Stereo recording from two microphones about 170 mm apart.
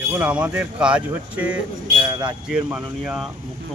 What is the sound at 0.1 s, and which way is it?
Speech, 10° right (ahead or behind).